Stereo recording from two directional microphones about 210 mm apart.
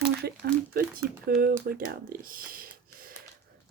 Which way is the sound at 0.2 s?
45° right (ahead or behind).